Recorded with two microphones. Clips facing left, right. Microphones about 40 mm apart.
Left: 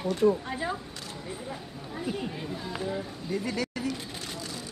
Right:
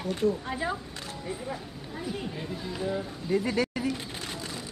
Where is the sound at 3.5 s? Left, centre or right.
Right.